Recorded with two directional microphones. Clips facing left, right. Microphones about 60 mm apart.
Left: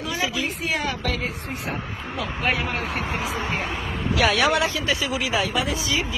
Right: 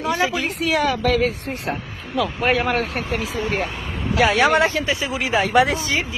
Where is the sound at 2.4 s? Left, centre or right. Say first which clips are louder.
Right 4 dB; right.